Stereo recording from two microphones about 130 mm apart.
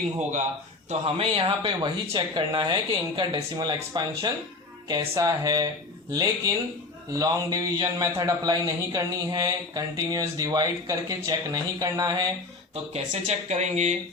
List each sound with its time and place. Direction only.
0.9 s a man's voice: 45° right (ahead or behind); by 12.3 s 30° right (ahead or behind)
12.7 s speech: 60° right (ahead or behind)